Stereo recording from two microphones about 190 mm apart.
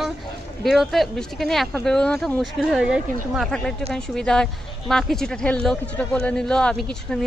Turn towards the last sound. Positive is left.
turn(degrees=0)  # may be behind; listen again after turning